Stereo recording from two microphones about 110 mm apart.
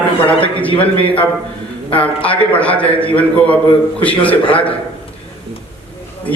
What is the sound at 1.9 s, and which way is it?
A man's voice, 15° left (ahead or behind).